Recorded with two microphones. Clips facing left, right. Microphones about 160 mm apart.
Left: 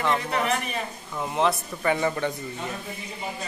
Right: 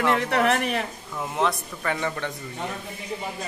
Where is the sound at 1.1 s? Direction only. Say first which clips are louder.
Left 1 dB; centre (ahead or behind).